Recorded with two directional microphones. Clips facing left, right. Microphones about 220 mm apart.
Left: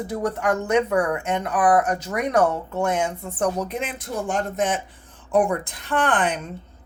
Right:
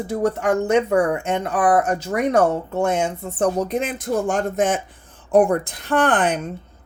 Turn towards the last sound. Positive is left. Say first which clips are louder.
# right 4 dB
turn(degrees=-45)  # may be behind; listen again after turning